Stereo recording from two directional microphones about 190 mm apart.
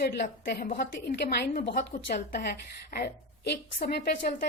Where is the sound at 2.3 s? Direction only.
60° left (ahead or behind).